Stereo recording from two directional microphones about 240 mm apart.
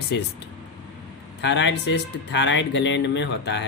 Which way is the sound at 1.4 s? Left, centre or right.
Left.